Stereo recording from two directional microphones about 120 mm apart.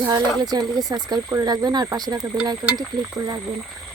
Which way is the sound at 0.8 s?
35° right (ahead or behind).